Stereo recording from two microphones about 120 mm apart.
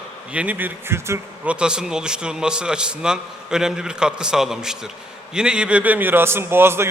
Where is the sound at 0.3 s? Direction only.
15° right (ahead or behind).